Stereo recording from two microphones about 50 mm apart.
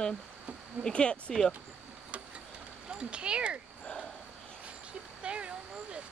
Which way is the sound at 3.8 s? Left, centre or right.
Centre.